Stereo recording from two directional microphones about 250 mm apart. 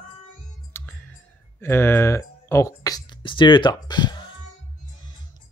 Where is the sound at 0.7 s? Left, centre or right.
Centre.